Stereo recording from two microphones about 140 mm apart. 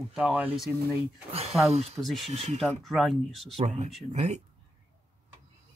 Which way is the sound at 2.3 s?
50° right (ahead or behind).